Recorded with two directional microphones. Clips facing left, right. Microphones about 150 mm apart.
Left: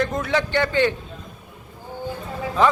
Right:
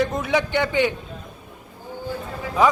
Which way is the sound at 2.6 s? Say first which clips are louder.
Even; 10° right (ahead or behind).